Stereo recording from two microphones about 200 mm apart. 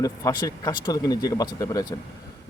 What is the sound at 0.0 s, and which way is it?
Speech, 15° left (ahead or behind).